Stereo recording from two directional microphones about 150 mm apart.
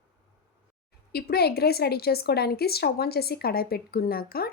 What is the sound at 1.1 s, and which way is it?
A woman's voice, 90° left.